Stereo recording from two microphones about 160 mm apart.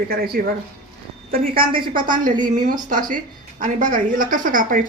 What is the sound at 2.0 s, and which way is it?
A woman's voice, 55° right (ahead or behind).